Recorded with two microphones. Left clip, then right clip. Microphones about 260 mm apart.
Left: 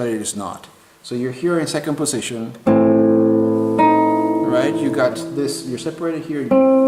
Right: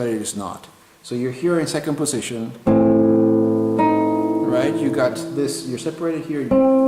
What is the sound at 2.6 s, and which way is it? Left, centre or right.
Music, centre.